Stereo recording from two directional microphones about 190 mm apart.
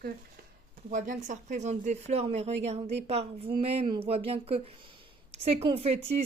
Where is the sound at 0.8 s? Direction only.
40° right (ahead or behind).